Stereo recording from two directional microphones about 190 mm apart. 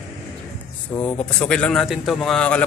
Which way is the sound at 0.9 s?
15° left (ahead or behind).